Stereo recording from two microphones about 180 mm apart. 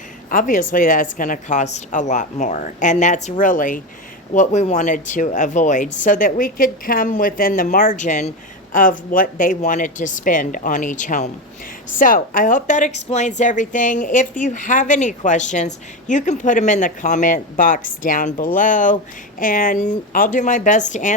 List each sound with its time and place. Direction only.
0.3 s speech: 45° left (ahead or behind)